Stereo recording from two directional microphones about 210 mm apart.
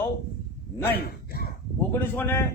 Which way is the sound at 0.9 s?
45° left (ahead or behind).